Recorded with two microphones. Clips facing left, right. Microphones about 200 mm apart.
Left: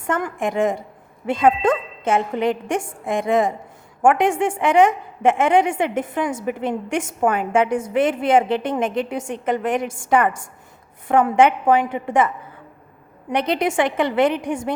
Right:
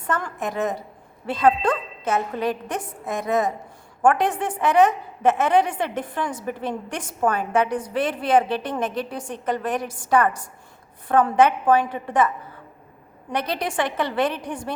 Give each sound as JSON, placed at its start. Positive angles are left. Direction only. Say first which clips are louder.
{"t": 0.0, "sound": "a woman's voice", "louder": "left 4 dB", "side_deg": 25}
{"t": 13.3, "sound": "a woman's voice", "louder": "left 5 dB", "side_deg": 20}